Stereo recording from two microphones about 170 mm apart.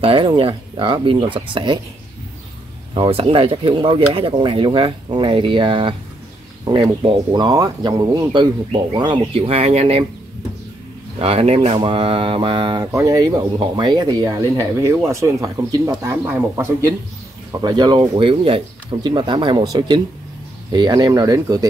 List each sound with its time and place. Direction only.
0.0 s speech: 30° right (ahead or behind)
2.9 s speech: 30° right (ahead or behind)
11.1 s speech: 35° right (ahead or behind); by 16.9 s 15° right (ahead or behind)
17.6 s speech: 25° right (ahead or behind)